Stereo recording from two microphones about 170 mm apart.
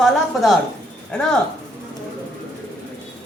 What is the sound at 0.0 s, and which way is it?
A woman's voice, centre (ahead or behind).